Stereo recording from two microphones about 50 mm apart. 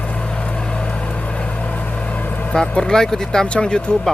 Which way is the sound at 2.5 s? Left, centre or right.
Centre.